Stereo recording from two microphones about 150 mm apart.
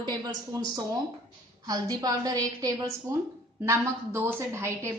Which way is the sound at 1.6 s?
25° right (ahead or behind).